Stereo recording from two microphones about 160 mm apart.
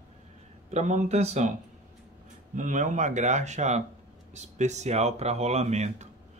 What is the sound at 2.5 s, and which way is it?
Speech, 50° right (ahead or behind).